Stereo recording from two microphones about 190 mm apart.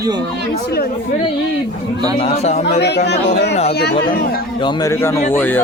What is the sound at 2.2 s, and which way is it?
Speech, 35° left (ahead or behind).